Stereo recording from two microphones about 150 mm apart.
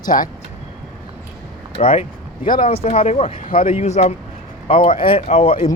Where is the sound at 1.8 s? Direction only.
40° left (ahead or behind).